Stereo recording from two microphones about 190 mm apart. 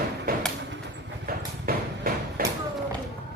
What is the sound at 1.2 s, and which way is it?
Clip-clop, 50° right (ahead or behind).